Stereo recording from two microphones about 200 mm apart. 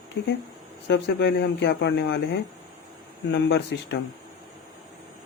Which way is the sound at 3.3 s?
60° left (ahead or behind).